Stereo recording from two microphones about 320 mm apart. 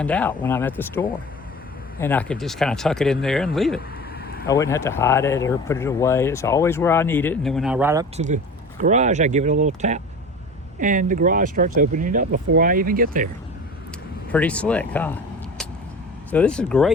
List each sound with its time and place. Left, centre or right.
0.0 s speech: centre
8.1 s speech: right
14.3 s speech: centre
16.3 s speech: centre